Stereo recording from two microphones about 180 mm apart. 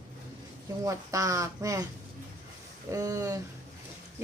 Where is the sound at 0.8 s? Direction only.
20° right (ahead or behind).